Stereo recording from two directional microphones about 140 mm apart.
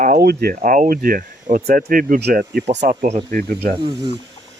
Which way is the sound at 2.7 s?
60° right (ahead or behind).